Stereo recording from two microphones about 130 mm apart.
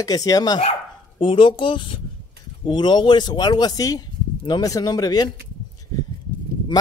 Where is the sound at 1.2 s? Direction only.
40° left (ahead or behind).